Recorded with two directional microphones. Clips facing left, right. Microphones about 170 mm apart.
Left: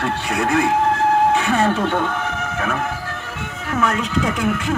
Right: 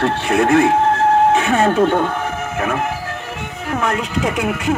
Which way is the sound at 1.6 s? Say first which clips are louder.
Right 4 dB; 45° right (ahead or behind).